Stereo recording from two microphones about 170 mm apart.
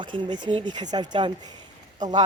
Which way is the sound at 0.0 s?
25° right (ahead or behind).